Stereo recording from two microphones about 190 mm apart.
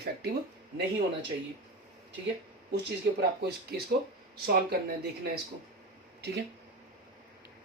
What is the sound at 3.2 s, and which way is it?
Speech, 60° right (ahead or behind).